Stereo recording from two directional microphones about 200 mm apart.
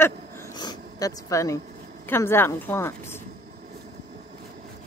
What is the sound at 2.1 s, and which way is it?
Speech, 10° left (ahead or behind).